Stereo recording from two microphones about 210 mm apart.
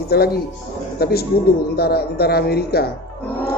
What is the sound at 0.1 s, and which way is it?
A man's voice, 50° left (ahead or behind).